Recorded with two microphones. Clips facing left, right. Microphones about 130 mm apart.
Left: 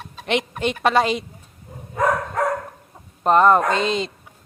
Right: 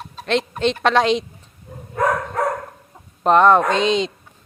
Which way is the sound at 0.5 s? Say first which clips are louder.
Right 1 dB; 10° left (ahead or behind).